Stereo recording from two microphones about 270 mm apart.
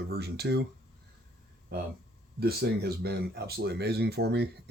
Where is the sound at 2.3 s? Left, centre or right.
Right.